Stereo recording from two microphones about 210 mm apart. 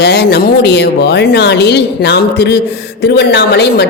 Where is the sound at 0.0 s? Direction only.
50° left (ahead or behind).